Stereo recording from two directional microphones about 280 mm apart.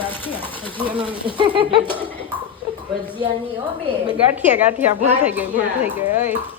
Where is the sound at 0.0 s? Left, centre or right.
Centre.